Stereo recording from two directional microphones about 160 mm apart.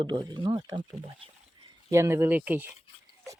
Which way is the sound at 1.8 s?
20° right (ahead or behind).